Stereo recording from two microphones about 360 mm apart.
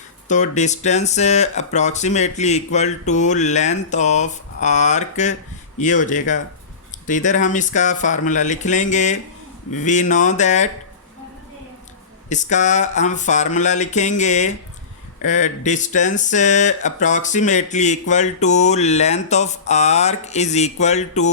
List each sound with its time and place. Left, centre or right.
0.3 s speech: centre
12.3 s speech: centre